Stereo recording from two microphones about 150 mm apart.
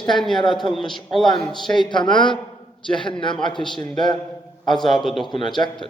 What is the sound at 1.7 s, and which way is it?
A man's voice, 30° left (ahead or behind).